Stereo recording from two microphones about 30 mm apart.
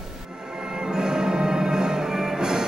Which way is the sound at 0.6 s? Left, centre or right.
Right.